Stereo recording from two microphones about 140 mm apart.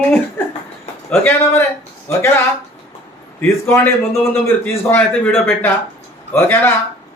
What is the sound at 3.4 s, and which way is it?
A man's voice, 15° left (ahead or behind).